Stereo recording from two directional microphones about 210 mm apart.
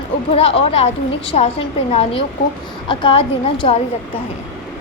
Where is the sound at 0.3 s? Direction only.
25° left (ahead or behind).